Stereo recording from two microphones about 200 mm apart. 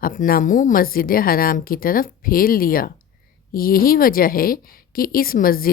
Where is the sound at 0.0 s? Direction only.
45° left (ahead or behind).